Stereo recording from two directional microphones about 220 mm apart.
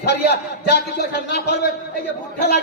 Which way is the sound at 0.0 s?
50° left (ahead or behind).